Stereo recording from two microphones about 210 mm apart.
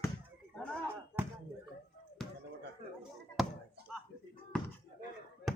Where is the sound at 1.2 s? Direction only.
10° right (ahead or behind).